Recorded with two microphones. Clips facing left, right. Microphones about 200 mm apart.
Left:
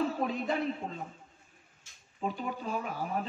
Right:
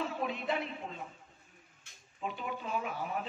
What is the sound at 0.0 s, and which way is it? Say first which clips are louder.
A man's voice: left 4 dB; 40° left (ahead or behind).